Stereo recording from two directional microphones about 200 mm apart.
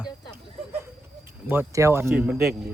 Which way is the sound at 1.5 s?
15° right (ahead or behind).